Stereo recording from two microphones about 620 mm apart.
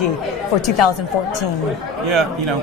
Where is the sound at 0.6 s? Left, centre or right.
Left.